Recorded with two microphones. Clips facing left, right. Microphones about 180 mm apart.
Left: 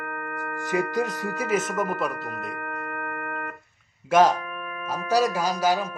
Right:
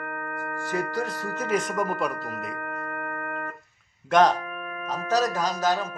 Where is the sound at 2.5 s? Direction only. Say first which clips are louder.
Even; 35° right (ahead or behind).